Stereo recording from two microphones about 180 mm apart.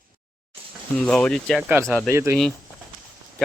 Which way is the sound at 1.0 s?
5° left (ahead or behind).